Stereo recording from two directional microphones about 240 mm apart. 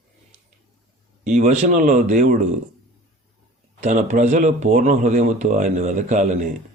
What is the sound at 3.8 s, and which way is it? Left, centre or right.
Speech, right.